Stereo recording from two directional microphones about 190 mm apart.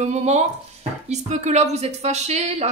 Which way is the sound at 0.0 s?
35° right (ahead or behind).